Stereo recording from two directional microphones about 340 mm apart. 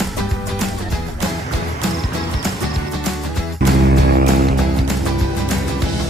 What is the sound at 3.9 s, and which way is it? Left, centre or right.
Music, right.